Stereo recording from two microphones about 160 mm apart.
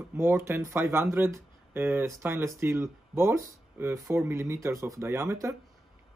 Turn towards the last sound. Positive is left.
turn(degrees=-15)  # may be behind; listen again after turning